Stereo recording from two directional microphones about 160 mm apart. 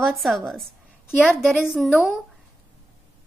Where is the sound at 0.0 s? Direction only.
Centre (ahead or behind).